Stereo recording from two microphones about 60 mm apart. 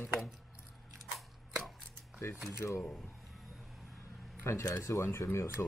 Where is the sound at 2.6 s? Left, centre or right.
Left.